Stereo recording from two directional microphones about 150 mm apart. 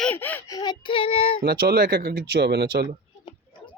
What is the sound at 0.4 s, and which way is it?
Child singing, 25° left (ahead or behind).